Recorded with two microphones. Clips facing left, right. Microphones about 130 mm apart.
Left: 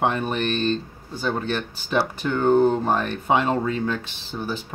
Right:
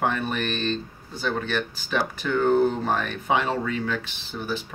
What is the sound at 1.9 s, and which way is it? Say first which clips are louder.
Speech: left 2 dB; 25° left (ahead or behind).